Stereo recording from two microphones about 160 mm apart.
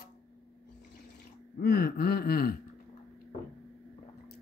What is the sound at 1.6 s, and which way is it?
Gasp, 75° left (ahead or behind).